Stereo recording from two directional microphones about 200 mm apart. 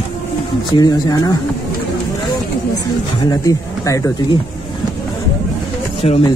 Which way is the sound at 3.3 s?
15° left (ahead or behind).